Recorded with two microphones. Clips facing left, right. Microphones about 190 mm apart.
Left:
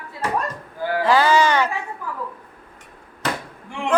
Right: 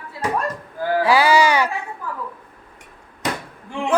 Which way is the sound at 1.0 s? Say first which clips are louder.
Even; 10° right (ahead or behind).